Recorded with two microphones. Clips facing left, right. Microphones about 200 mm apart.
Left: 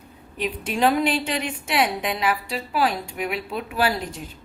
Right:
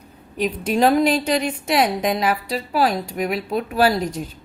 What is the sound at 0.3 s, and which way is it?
A woman's voice, 40° right (ahead or behind).